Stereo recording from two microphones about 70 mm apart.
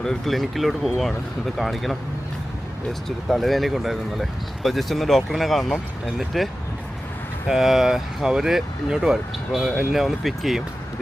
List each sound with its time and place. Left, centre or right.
0.0 s speech: centre
3.2 s speech: centre